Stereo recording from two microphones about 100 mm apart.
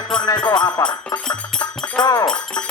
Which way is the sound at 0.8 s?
35° left (ahead or behind).